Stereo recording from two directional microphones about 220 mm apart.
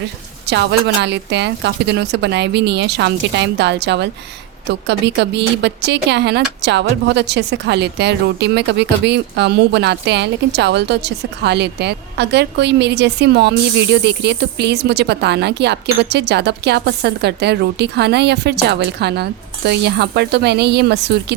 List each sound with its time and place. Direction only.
0.4 s a woman's voice: 50° right (ahead or behind)